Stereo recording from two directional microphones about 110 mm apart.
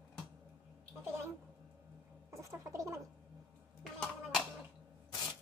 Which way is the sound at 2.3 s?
25° right (ahead or behind).